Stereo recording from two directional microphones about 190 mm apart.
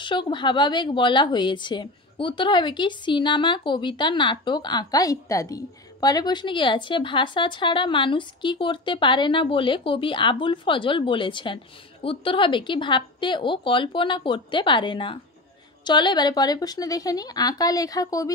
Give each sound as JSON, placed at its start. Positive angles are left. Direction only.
{"t": 0.0, "sound": "a woman's voice", "side_deg": 25}